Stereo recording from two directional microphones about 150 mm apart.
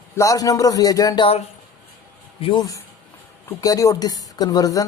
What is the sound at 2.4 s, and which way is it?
Speech, 30° left (ahead or behind).